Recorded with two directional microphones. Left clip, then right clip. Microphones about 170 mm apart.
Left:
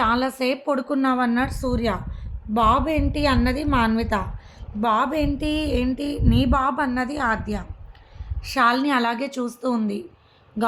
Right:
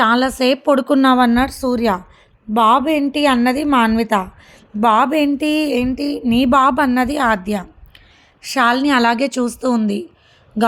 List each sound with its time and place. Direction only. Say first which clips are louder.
0.0 s speech: right 7 dB; 45° right (ahead or behind)
6.0 s music: right 6 dB; 30° right (ahead or behind)
6.5 s a woman's voice: right 11 dB; 65° right (ahead or behind); by 10.0 s 45° right (ahead or behind)